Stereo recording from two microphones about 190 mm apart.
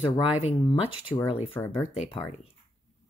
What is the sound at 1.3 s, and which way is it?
Speech, 30° left (ahead or behind).